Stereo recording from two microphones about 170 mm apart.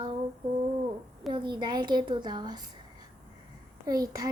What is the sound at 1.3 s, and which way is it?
A woman's voice, 25° right (ahead or behind).